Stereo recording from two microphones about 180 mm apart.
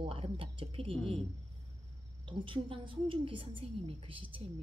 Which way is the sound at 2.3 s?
30° right (ahead or behind).